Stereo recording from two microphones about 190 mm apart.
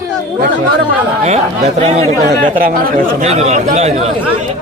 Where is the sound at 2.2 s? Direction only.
50° right (ahead or behind).